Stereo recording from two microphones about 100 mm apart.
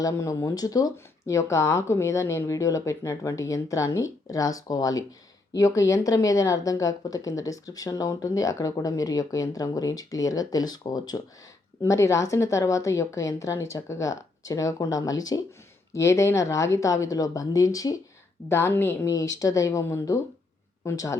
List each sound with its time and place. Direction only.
0.0 s speech: 35° left (ahead or behind)
11.8 s speech: 30° left (ahead or behind)
18.4 s a woman's voice: 25° left (ahead or behind)